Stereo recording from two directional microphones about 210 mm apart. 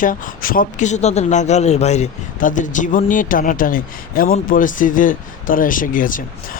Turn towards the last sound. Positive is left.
turn(degrees=40)  # may be behind; listen again after turning